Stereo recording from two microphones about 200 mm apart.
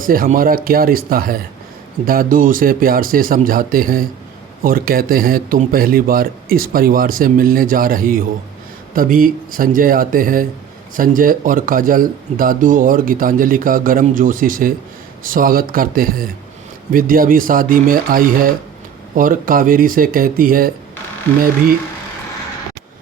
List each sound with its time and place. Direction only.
0.0 s speech: 45° right (ahead or behind)